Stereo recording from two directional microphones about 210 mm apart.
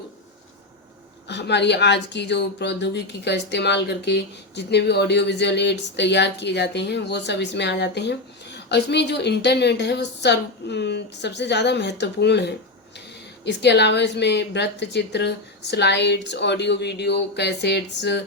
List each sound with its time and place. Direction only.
1.3 s speech: 55° left (ahead or behind)